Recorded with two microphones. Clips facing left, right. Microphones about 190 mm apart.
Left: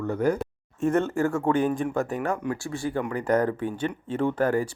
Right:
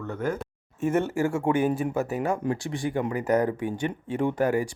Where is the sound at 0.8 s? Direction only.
10° right (ahead or behind).